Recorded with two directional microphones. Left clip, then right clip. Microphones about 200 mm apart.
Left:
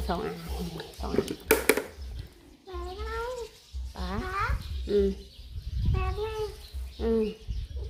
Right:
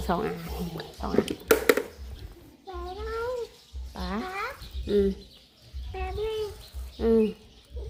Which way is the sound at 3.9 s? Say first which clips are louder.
Right 2 dB; 20° right (ahead or behind).